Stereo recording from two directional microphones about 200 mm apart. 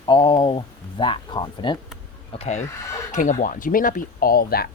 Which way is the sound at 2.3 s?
30° left (ahead or behind).